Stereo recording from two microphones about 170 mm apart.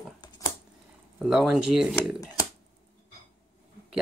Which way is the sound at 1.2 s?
Centre (ahead or behind).